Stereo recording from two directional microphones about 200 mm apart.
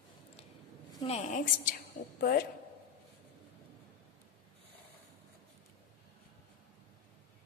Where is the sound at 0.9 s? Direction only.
25° left (ahead or behind); by 2.5 s 45° left (ahead or behind).